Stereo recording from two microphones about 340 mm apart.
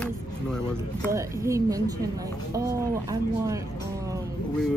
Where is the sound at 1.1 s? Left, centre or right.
Centre.